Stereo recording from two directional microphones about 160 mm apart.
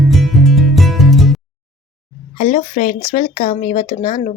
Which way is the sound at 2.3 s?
45° left (ahead or behind).